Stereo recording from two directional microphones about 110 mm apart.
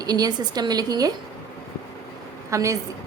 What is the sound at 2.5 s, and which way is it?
Speech, 30° right (ahead or behind).